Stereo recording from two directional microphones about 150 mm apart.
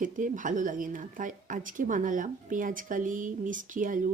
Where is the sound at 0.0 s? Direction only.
60° right (ahead or behind).